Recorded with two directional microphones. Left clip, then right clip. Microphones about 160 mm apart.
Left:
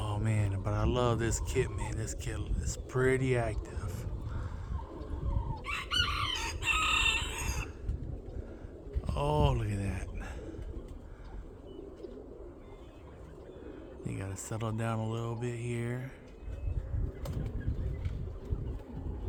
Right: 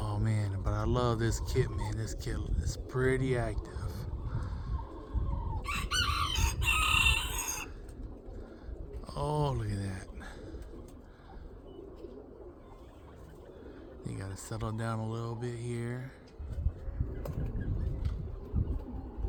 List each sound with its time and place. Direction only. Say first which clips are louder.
0.0 s speech: left 1 dB; centre (ahead or behind)
5.6 s chicken: even; 75° right (ahead or behind)
9.0 s a sound: left 3 dB; centre (ahead or behind)
14.0 s speech: left 2 dB; centre (ahead or behind)